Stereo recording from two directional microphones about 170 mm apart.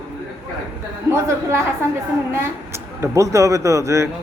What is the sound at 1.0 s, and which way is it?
Speech, 15° right (ahead or behind).